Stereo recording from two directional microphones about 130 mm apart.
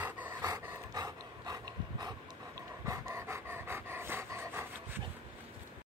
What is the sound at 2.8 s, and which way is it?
Pant, 25° right (ahead or behind).